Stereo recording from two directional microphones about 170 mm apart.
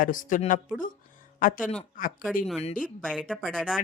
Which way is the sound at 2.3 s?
Centre (ahead or behind).